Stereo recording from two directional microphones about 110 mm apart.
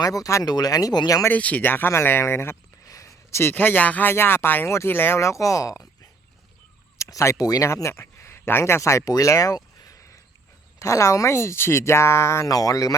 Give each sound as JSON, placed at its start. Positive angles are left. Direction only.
{"t": 0.0, "sound": "speech", "side_deg": 35}
{"t": 1.2, "sound": "speech", "side_deg": 15}
{"t": 7.0, "sound": "speech", "side_deg": 30}